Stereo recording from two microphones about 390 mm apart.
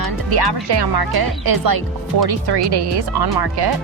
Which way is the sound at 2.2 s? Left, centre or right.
Right.